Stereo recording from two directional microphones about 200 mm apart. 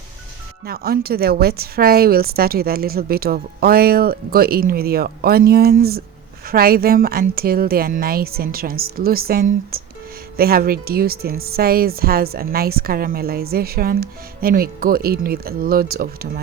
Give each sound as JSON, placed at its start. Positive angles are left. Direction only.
{"t": 0.6, "sound": "a woman's voice", "side_deg": -50}